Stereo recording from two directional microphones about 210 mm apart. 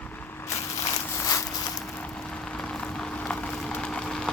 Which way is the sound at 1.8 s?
5° left (ahead or behind).